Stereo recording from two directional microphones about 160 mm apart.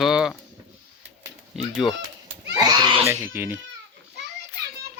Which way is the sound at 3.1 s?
15° right (ahead or behind).